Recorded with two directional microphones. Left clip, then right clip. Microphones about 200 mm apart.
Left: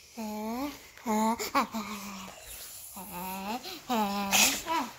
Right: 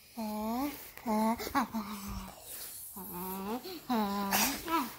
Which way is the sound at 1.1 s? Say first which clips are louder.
Left 3 dB; 15° left (ahead or behind).